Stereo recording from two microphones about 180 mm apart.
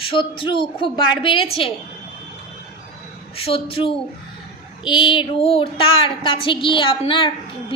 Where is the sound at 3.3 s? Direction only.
30° left (ahead or behind).